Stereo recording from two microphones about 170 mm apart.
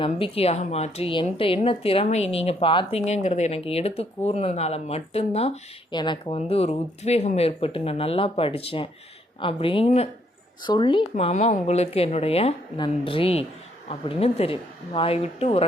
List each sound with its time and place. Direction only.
0.0 s speech: 35° left (ahead or behind)
5.9 s speech: 25° left (ahead or behind)